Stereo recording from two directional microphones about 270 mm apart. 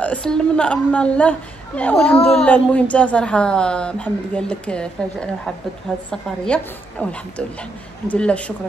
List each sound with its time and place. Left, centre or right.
0.0 s a man's voice: centre